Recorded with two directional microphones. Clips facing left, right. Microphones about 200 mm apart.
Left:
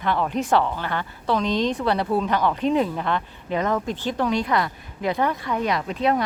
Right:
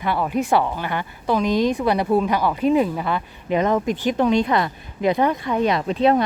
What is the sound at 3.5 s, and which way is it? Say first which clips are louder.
Speech: right 4 dB; 20° right (ahead or behind).